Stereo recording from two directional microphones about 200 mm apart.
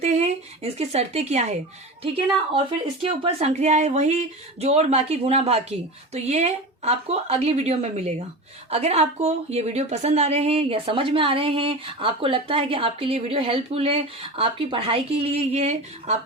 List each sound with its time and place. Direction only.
0.0 s speech: 35° right (ahead or behind)
3.0 s a woman's voice: 30° right (ahead or behind)